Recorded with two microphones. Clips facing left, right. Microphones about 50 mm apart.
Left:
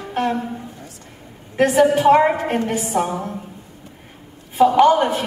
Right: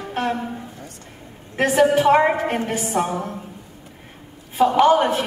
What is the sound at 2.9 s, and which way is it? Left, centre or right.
Speech, centre.